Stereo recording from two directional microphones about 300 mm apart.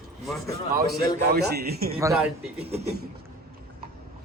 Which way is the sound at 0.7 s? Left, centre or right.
Right.